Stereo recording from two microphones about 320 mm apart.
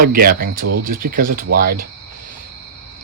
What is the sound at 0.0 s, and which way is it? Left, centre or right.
Speech, right.